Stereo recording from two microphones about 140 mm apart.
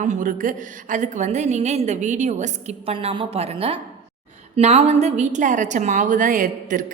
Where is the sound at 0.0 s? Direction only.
65° right (ahead or behind).